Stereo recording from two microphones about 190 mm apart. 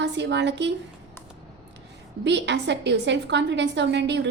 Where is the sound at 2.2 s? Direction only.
65° right (ahead or behind).